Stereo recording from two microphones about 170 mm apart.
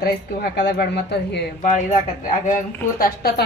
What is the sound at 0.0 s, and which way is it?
Speech, 70° left (ahead or behind).